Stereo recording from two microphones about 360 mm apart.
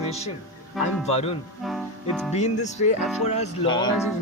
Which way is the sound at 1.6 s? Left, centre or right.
Centre.